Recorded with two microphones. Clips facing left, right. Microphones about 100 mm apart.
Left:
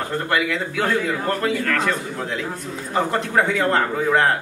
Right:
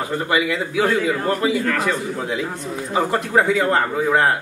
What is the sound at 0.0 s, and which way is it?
A man's voice, 5° right (ahead or behind).